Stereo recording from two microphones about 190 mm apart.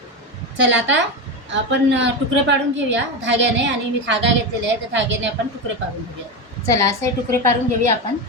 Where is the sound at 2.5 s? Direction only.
70° right (ahead or behind).